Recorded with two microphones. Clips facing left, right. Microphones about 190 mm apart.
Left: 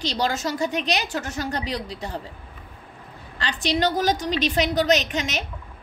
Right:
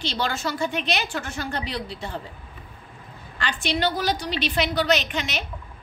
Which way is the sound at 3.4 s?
35° left (ahead or behind).